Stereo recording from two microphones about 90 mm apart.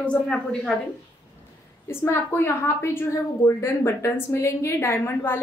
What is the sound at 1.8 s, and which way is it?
A woman's voice, 25° left (ahead or behind).